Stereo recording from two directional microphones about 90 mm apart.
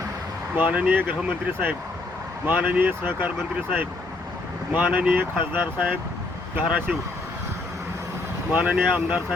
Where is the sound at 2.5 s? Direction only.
15° right (ahead or behind).